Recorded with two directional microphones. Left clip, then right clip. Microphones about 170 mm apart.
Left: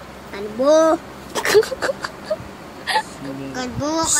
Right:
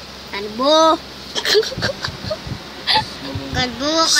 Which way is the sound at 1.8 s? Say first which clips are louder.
Even; 20° left (ahead or behind).